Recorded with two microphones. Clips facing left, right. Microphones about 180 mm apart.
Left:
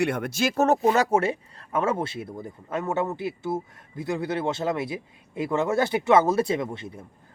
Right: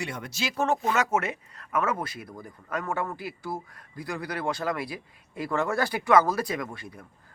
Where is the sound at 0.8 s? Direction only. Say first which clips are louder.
Left 5 dB; 35° left (ahead or behind).